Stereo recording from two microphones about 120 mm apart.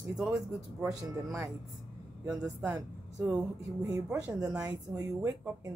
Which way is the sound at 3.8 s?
30° right (ahead or behind).